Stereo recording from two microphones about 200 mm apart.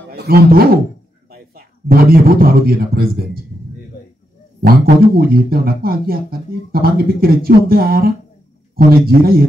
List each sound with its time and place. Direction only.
0.1 s a man's voice: 50° right (ahead or behind)
4.6 s speech: 50° right (ahead or behind)